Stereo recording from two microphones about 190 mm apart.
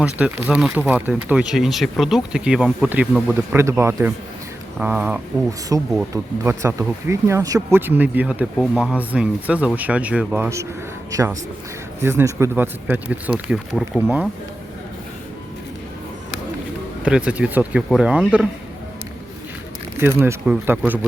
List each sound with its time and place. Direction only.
0.0 s speech: 5° right (ahead or behind)
5.5 s speech: 15° right (ahead or behind)
12.0 s speech: 15° right (ahead or behind)
17.0 s speech: 5° right (ahead or behind)
20.0 s speech: 15° right (ahead or behind)